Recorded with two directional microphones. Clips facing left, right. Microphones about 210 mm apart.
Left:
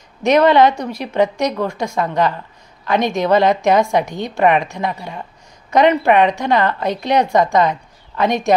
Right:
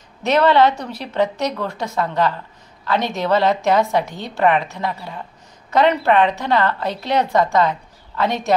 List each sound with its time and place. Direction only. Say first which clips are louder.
0.2 s a woman's voice: left 3 dB; 15° left (ahead or behind)